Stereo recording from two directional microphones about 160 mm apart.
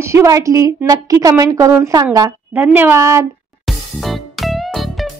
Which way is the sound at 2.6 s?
10° right (ahead or behind).